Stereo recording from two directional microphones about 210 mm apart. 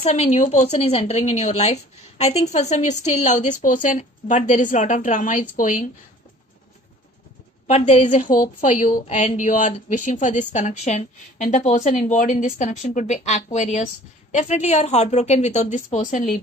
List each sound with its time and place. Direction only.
0.0 s a woman's voice: 30° left (ahead or behind)
7.6 s a woman's voice: 35° left (ahead or behind)